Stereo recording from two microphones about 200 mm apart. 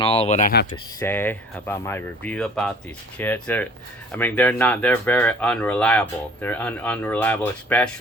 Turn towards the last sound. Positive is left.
turn(degrees=5)  # may be behind; listen again after turning